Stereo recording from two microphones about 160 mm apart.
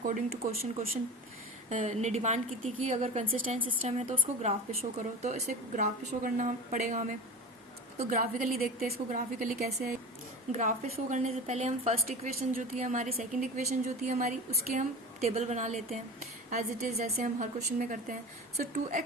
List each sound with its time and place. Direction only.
0.0 s a woman's voice: 55° right (ahead or behind)
1.7 s a woman's voice: 45° right (ahead or behind)